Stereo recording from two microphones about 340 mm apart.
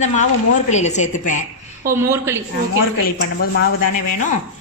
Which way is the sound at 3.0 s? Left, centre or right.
Left.